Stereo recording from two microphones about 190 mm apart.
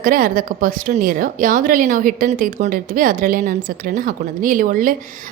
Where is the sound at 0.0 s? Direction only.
45° right (ahead or behind).